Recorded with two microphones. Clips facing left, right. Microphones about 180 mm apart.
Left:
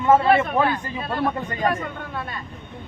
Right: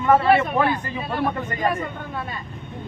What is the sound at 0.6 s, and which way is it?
Speech, 10° right (ahead or behind).